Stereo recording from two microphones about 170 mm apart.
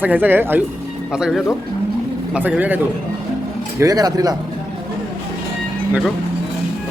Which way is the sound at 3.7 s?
20° right (ahead or behind).